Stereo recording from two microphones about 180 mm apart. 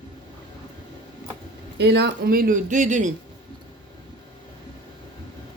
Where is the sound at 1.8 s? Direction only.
65° right (ahead or behind); by 3.1 s 45° right (ahead or behind).